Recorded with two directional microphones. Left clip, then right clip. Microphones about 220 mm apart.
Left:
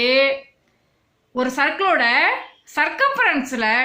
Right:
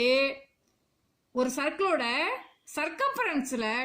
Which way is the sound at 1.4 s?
35° right (ahead or behind).